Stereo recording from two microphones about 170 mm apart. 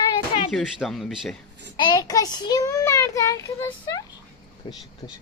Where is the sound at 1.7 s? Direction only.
25° left (ahead or behind).